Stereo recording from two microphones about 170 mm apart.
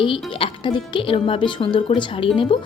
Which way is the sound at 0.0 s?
30° left (ahead or behind).